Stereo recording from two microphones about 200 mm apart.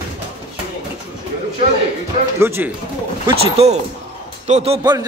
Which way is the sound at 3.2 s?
30° right (ahead or behind).